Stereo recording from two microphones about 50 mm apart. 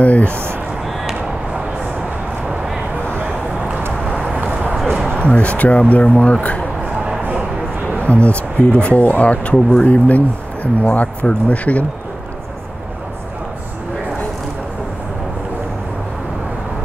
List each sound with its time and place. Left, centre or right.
0.0 s speech: left
5.2 s speech: left
8.0 s speech: left